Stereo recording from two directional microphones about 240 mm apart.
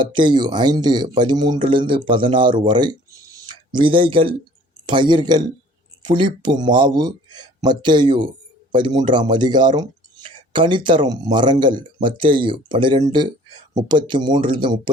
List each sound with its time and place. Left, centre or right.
0.0 s speech: centre